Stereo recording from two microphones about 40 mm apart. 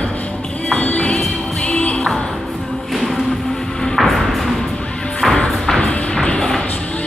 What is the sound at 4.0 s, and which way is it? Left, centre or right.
Music, centre.